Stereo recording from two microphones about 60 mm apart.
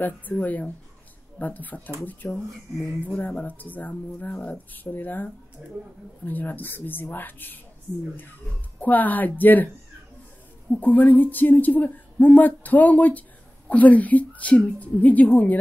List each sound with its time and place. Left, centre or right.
0.0 s speech: left
5.6 s speech: centre
6.2 s speech: left
8.7 s speech: left
10.7 s speech: left